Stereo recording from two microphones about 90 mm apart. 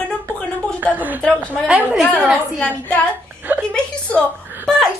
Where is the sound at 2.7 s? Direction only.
15° left (ahead or behind).